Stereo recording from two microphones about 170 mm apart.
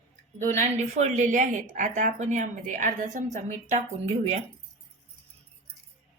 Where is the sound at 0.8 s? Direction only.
45° right (ahead or behind).